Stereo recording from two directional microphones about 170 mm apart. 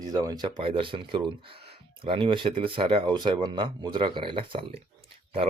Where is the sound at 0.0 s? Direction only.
20° right (ahead or behind).